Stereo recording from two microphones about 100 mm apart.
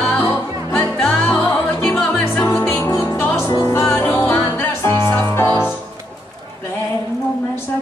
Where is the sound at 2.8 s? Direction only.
30° left (ahead or behind).